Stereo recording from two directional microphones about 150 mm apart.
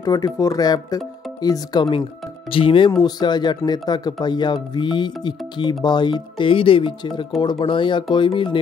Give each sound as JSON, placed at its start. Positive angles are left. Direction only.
{"t": 0.0, "sound": "speech", "side_deg": 25}